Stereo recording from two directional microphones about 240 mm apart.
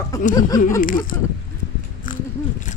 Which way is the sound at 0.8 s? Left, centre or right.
Left.